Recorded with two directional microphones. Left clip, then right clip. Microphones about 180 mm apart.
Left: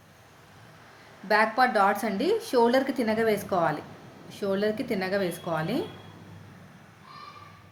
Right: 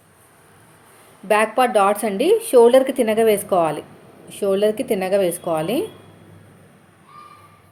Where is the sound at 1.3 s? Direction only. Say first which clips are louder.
Right 6 dB; 20° right (ahead or behind).